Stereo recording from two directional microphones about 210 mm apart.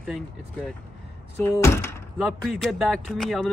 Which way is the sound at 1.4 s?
10° left (ahead or behind).